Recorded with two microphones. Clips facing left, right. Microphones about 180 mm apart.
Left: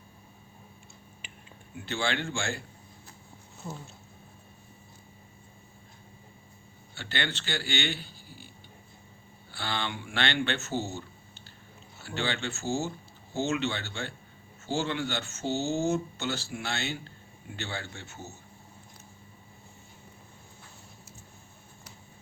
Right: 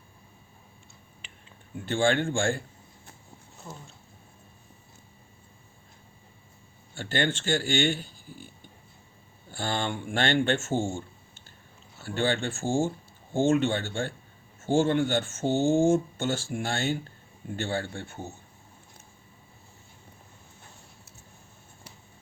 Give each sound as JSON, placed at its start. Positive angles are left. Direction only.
{"t": 1.2, "sound": "a sound", "side_deg": 10}
{"t": 1.7, "sound": "speech", "side_deg": -50}
{"t": 6.9, "sound": "speech", "side_deg": -45}
{"t": 9.5, "sound": "speech", "side_deg": -45}
{"t": 10.9, "sound": "a sound", "side_deg": -50}
{"t": 12.0, "sound": "speech", "side_deg": -50}